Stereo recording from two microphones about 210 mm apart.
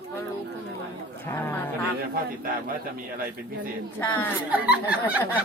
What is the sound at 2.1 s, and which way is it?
Speech, 40° right (ahead or behind).